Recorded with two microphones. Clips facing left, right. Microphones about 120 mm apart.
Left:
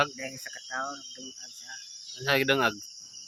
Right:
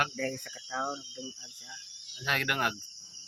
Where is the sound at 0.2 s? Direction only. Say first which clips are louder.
Right 6 dB; 40° right (ahead or behind).